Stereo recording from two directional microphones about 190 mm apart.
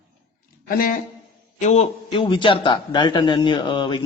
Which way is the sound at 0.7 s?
50° left (ahead or behind).